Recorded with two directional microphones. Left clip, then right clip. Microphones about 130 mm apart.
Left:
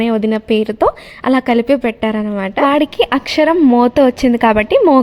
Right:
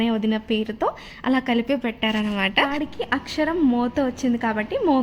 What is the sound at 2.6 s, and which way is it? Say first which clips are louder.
A woman's voice: left 13 dB; 50° left (ahead or behind).